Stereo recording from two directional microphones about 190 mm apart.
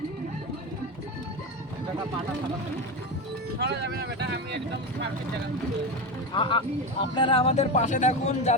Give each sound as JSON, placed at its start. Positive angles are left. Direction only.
{"t": 3.6, "sound": "speech", "side_deg": -60}
{"t": 6.3, "sound": "speech", "side_deg": 25}